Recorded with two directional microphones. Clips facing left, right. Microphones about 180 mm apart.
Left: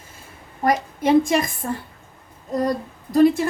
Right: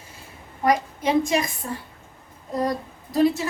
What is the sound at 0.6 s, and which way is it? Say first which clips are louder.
A woman's voice: left 1 dB; 50° left (ahead or behind).